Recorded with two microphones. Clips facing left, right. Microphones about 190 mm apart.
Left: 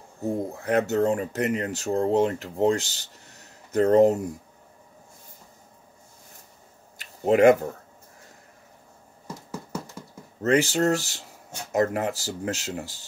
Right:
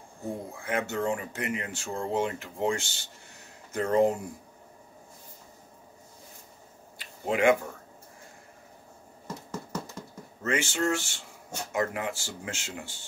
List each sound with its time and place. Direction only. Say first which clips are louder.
0.5 s speech: left 7 dB; 40° left (ahead or behind)
7.0 s speech: left 8 dB; 40° left (ahead or behind)
9.5 s a sound: left 2 dB; 10° left (ahead or behind)
10.4 s speech: left 7 dB; 35° left (ahead or behind)